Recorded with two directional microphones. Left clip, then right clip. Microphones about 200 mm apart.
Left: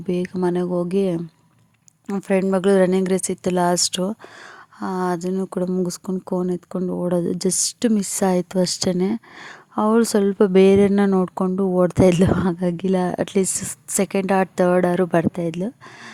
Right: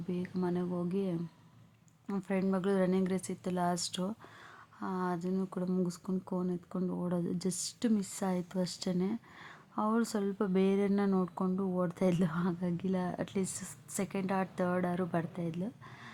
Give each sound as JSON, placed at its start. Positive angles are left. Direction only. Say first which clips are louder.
{"t": 0.1, "sound": "speech", "louder": "left 15 dB", "side_deg": 45}